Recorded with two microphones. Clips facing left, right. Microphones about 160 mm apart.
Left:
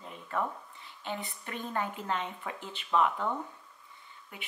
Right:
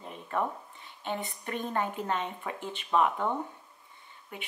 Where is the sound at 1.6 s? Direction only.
20° right (ahead or behind).